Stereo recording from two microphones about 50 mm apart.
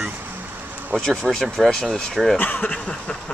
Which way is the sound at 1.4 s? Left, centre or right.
Centre.